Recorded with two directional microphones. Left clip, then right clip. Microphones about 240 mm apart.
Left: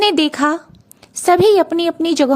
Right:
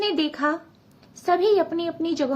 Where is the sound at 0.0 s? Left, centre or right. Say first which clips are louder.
Left 9 dB; left.